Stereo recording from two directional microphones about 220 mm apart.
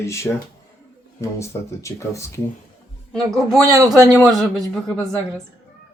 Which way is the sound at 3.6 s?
15° right (ahead or behind).